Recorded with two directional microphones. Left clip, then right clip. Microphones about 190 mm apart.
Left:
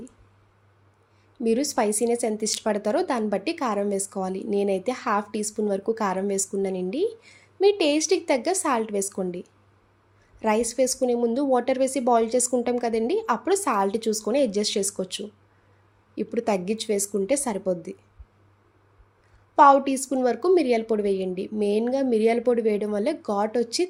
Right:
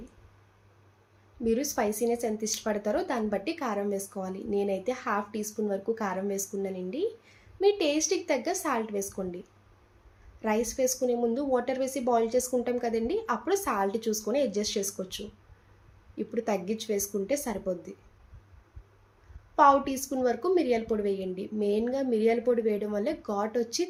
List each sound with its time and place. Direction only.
1.5 s a woman's voice: 55° left (ahead or behind)
19.5 s a woman's voice: 45° left (ahead or behind)